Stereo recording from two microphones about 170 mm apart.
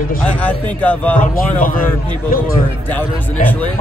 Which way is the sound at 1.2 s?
50° left (ahead or behind).